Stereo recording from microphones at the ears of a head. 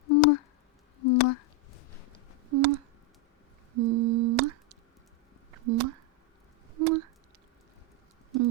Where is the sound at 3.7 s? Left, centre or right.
Right.